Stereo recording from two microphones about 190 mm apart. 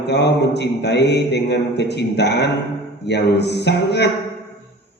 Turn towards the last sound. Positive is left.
turn(degrees=60)  # may be behind; listen again after turning